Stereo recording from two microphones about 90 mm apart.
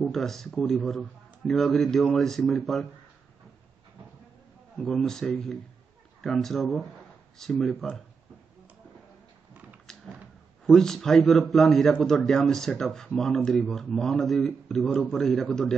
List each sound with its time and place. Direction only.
0.0 s a man's voice: 5° left (ahead or behind)
4.7 s a man's voice: 5° left (ahead or behind)
9.9 s a sound: 5° left (ahead or behind)
10.7 s a man's voice: 5° left (ahead or behind)